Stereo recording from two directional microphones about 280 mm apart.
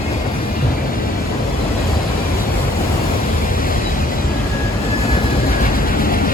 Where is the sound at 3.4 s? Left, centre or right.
Left.